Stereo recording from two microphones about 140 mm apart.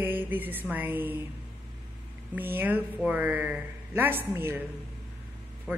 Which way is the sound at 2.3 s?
15° right (ahead or behind).